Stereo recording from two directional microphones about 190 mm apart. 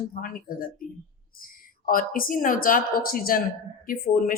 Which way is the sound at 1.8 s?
50° left (ahead or behind).